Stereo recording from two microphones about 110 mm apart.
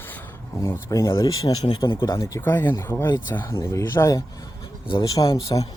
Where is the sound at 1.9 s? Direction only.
45° left (ahead or behind).